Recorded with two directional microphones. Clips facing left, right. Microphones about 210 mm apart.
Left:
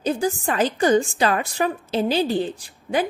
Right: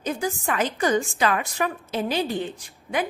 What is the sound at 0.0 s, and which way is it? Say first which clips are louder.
A woman's voice: left 4 dB; 35° left (ahead or behind).